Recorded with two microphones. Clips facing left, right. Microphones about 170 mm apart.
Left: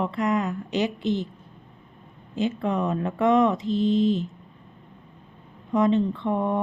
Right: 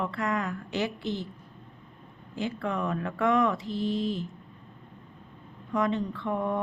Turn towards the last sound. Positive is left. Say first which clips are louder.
# left 5 dB
turn(degrees=20)  # may be behind; listen again after turning